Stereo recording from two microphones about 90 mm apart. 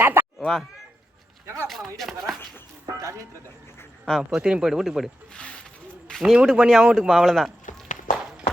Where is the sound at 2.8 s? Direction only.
35° right (ahead or behind).